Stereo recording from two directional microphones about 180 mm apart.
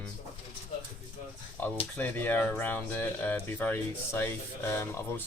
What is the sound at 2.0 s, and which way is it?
Speech, 10° left (ahead or behind).